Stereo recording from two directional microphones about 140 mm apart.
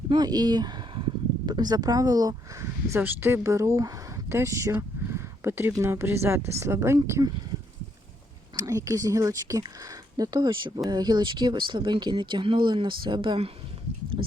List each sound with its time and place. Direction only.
0.1 s speech: 30° right (ahead or behind)
8.5 s speech: 25° right (ahead or behind)